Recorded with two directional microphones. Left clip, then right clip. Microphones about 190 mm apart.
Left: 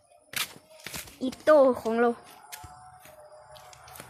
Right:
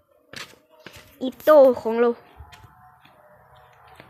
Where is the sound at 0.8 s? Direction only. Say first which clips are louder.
Right 3 dB; 10° right (ahead or behind).